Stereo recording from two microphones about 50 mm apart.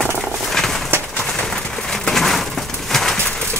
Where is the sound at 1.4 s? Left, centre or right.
Centre.